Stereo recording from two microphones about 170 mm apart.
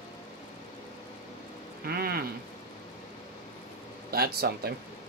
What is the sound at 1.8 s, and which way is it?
Speech, 60° right (ahead or behind).